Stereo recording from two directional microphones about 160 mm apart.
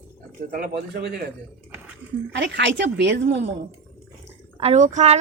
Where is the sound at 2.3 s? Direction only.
90° right.